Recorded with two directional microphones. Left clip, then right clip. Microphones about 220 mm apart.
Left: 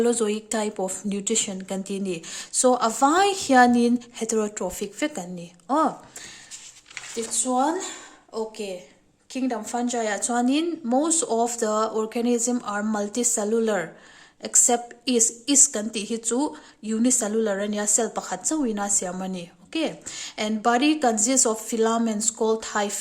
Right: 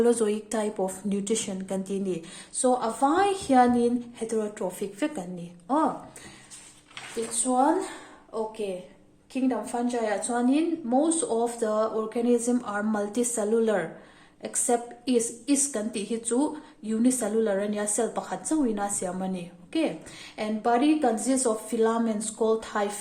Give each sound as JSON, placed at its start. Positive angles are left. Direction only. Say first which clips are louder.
{"t": 0.0, "sound": "a woman's voice", "louder": "left 1 dB", "side_deg": 20}
{"t": 7.4, "sound": "a woman's voice", "louder": "right 1 dB", "side_deg": 35}